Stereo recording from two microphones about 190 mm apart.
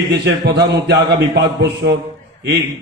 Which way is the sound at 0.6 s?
65° right (ahead or behind).